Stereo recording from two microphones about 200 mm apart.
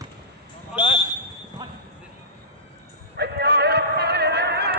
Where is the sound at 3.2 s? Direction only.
55° right (ahead or behind).